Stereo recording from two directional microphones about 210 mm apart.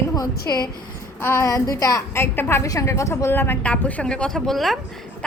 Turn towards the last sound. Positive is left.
turn(degrees=0)  # may be behind; listen again after turning